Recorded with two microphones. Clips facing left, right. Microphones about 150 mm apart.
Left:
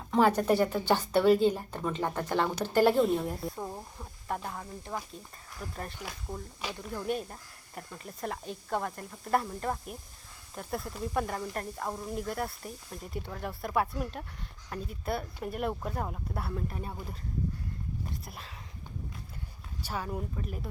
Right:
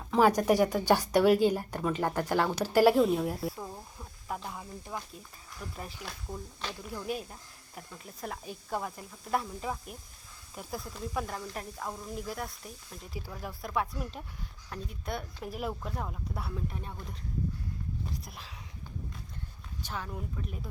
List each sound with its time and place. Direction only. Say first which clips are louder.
0.1 s speech: right 1 dB; 10° right (ahead or behind)
3.6 s a sound: left 3 dB; 20° left (ahead or behind)
4.4 s speech: left 2 dB; centre (ahead or behind)
18.1 s speech: even; centre (ahead or behind)
19.8 s speech: left 3 dB; 10° left (ahead or behind)